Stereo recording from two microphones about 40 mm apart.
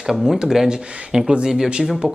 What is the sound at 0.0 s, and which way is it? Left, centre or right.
Speech, centre.